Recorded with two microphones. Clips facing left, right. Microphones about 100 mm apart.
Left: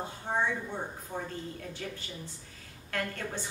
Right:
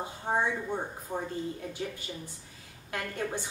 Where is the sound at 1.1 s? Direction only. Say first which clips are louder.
Right 5 dB; 15° right (ahead or behind).